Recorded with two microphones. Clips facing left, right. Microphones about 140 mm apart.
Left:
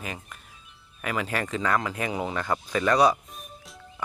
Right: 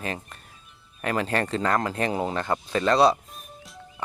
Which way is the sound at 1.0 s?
35° right (ahead or behind).